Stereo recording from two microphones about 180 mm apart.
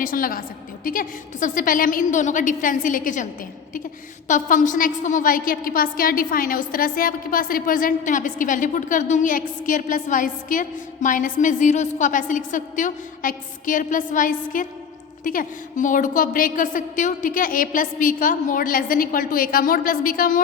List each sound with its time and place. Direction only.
0.0 s a woman's voice: 50° left (ahead or behind)
4.3 s a woman's voice: 45° left (ahead or behind)